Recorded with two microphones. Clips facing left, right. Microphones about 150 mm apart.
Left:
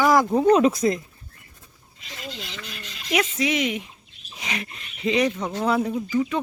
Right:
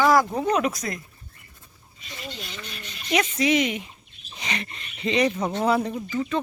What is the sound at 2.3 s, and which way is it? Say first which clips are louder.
Speech: left 1 dB; 90° left.